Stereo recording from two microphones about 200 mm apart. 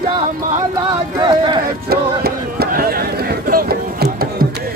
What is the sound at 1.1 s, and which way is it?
Speech, 20° right (ahead or behind).